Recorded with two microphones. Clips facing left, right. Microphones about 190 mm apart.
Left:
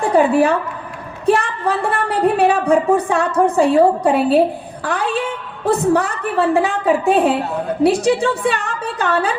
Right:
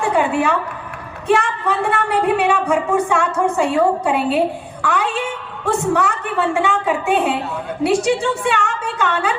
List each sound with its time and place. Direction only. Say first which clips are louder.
0.0 s a woman's voice: left 4 dB; 35° left (ahead or behind)